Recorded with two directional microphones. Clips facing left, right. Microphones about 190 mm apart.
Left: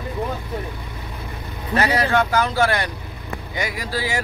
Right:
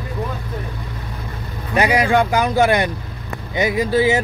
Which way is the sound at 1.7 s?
15° right (ahead or behind).